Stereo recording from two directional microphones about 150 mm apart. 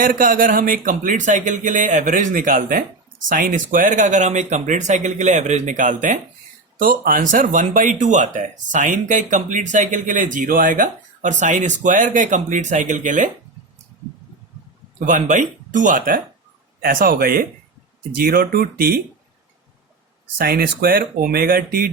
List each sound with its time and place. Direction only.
0.0 s speech: 65° right (ahead or behind)
14.9 s speech: 60° right (ahead or behind); by 19.0 s 85° right
20.4 s speech: 85° right